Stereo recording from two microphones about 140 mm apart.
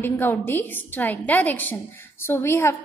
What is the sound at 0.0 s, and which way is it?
A woman's voice, 15° left (ahead or behind).